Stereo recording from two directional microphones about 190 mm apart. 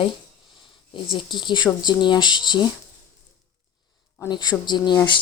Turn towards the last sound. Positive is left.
turn(degrees=25)  # may be behind; listen again after turning